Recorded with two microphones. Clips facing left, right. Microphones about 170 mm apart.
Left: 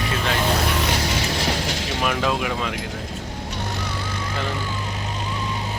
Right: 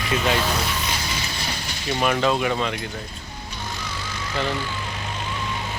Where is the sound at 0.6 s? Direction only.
65° left (ahead or behind); by 2.0 s 90° left.